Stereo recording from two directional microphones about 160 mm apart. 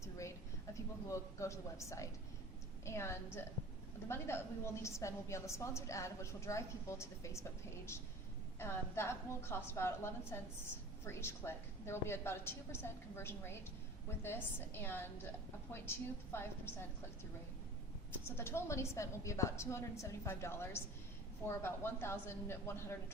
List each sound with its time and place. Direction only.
0.0 s a sound: 20° left (ahead or behind)
1.0 s a woman's voice: 20° left (ahead or behind)
8.5 s a woman's voice: 15° left (ahead or behind)
16.3 s a woman's voice: 15° left (ahead or behind)
18.1 s a woman's voice: 15° left (ahead or behind)